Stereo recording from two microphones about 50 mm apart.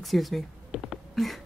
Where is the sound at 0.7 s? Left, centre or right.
Centre.